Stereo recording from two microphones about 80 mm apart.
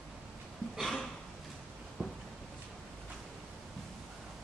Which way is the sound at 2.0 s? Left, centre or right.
Centre.